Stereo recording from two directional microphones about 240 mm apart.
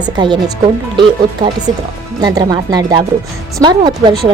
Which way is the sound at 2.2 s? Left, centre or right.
Centre.